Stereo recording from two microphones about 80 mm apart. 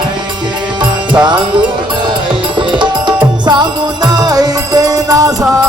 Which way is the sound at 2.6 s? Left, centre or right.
Right.